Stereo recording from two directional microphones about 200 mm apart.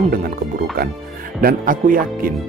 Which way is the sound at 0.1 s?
45° right (ahead or behind).